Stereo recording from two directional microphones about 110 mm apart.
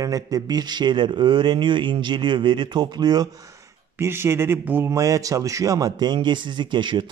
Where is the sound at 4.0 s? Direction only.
25° right (ahead or behind).